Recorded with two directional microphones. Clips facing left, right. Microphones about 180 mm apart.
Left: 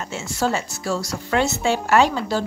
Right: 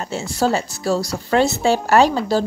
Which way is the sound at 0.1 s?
35° right (ahead or behind).